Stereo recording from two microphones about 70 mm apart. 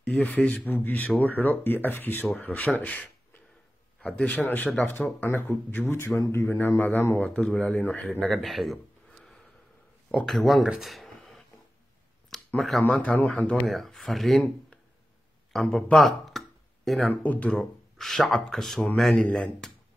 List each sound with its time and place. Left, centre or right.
0.0 s speech: centre
4.2 s speech: centre
4.7 s a man's voice: left
7.2 s speech: centre
7.8 s speech: left
8.3 s speech: centre
10.2 s speech: centre
10.8 s a sound: centre
12.5 s speech: centre; by 13.6 s left
13.7 s speech: centre
15.5 s speech: centre
17.1 s speech: left
17.6 s speech: centre